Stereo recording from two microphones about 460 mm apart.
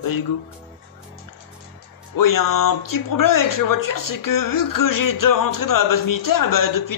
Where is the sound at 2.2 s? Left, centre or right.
Left.